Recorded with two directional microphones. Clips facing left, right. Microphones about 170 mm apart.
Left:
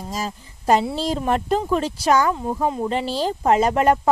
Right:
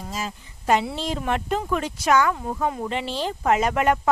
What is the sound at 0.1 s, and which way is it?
A woman's voice, 35° left (ahead or behind).